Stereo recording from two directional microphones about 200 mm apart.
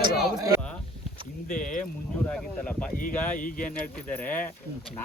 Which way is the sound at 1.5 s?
40° left (ahead or behind).